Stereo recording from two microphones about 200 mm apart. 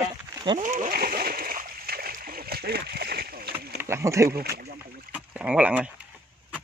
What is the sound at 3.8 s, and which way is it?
Speech, 15° right (ahead or behind).